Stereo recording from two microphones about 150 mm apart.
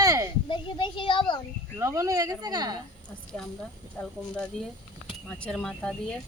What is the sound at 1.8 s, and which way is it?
Speech, 20° right (ahead or behind).